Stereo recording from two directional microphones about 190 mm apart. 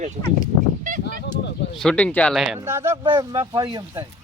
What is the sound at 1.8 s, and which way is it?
Speech, 5° left (ahead or behind).